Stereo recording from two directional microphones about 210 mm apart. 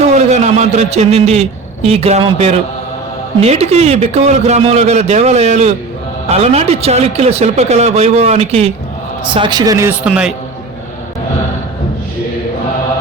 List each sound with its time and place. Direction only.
0.1 s a man's voice: 35° right (ahead or behind); by 10.3 s 5° right (ahead or behind)